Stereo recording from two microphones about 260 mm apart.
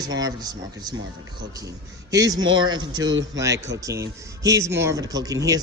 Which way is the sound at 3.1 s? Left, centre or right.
Right.